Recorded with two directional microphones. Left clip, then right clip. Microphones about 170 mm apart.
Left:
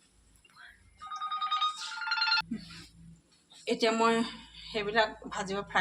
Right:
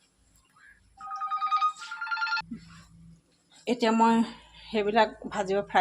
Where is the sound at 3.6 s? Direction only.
60° right (ahead or behind).